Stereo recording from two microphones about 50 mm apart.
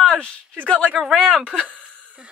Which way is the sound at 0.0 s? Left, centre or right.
Centre.